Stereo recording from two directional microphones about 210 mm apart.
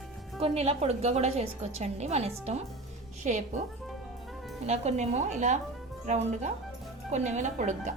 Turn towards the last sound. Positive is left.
turn(degrees=-35)  # may be behind; listen again after turning